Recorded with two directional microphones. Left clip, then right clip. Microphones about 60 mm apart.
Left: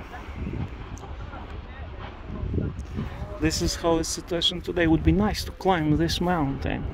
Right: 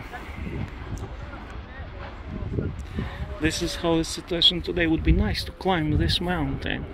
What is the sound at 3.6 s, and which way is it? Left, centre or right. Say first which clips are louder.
Speech: left 1 dB; left.